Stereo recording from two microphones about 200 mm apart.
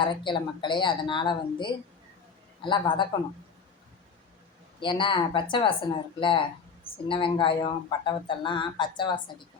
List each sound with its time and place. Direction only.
0.0 s speech: 25° left (ahead or behind)
4.8 s speech: 25° left (ahead or behind)